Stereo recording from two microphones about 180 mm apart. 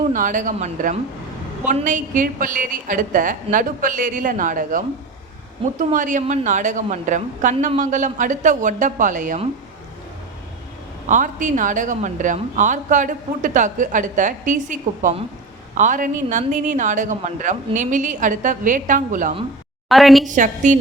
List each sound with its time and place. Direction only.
0.1 s a woman's voice: 45° right (ahead or behind)
5.9 s a woman's voice: 45° right (ahead or behind)
11.0 s a woman's voice: 45° right (ahead or behind)
19.9 s a woman's voice: centre (ahead or behind)
20.2 s a woman's voice: 45° right (ahead or behind)